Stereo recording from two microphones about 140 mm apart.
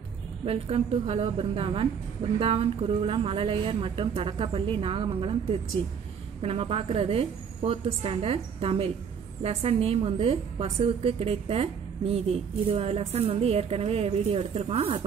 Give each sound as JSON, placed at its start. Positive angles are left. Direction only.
{"t": 0.5, "sound": "a woman's voice", "side_deg": -45}